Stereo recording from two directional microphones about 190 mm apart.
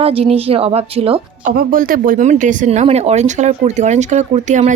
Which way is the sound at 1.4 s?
50° right (ahead or behind).